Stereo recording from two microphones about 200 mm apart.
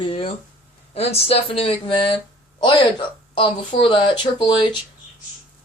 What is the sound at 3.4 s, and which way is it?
Speech, 25° left (ahead or behind).